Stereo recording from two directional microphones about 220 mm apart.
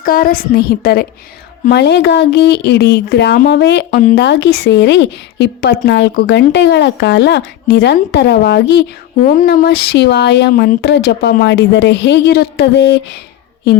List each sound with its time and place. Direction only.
0.0 s a woman's voice: 40° left (ahead or behind)
3.9 s speech: 35° left (ahead or behind)
4.2 s a woman's voice: 50° left (ahead or behind)
9.2 s a woman's voice: 40° left (ahead or behind)